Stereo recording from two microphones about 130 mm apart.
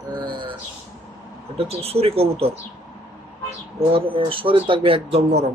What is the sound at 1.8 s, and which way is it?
Speech, 50° right (ahead or behind).